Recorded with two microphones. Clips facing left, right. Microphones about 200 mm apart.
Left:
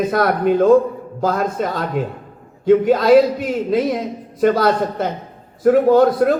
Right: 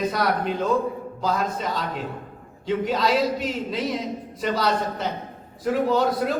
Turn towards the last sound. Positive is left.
turn(degrees=55)  # may be behind; listen again after turning